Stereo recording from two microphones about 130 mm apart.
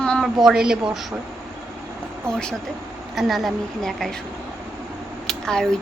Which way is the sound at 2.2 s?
5° left (ahead or behind).